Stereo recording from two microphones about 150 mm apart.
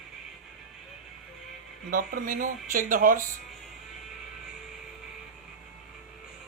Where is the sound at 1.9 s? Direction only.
65° right (ahead or behind).